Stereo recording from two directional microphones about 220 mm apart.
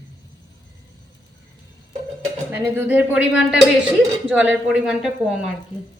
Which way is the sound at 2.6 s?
10° right (ahead or behind).